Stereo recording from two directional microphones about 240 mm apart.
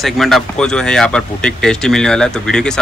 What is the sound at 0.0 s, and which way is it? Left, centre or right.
Speech, centre.